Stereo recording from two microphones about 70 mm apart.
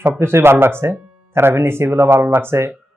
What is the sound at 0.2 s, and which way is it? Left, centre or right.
Speech, right.